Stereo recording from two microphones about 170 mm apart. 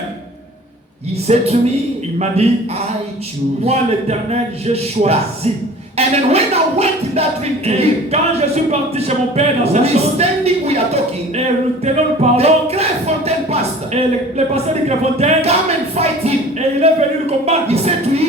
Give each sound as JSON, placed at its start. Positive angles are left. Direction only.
{"t": 1.3, "sound": "music", "side_deg": -40}
{"t": 2.1, "sound": "a man's voice", "side_deg": -40}
{"t": 4.3, "sound": "music", "side_deg": -40}
{"t": 16.0, "sound": "a sound", "side_deg": -35}
{"t": 17.4, "sound": "music", "side_deg": -40}